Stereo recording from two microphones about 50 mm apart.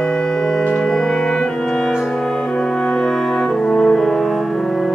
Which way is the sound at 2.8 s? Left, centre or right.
Centre.